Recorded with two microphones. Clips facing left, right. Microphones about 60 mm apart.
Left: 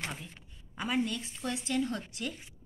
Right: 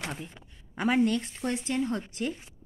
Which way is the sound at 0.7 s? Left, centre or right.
Right.